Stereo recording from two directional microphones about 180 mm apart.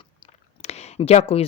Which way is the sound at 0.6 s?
35° left (ahead or behind).